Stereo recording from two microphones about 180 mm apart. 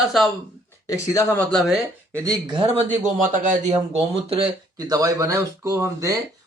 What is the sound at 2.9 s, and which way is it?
Speech, 45° right (ahead or behind).